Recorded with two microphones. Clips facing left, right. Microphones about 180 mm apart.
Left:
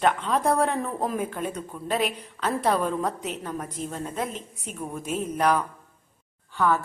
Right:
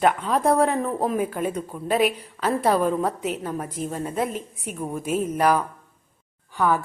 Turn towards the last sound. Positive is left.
turn(degrees=-15)  # may be behind; listen again after turning